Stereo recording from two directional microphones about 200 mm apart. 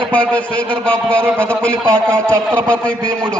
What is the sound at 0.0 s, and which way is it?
A man's voice, 5° left (ahead or behind).